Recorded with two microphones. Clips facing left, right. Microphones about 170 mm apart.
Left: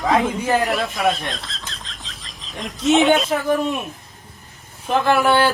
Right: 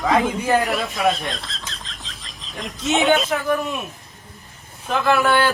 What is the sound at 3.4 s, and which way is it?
Speech, 30° left (ahead or behind).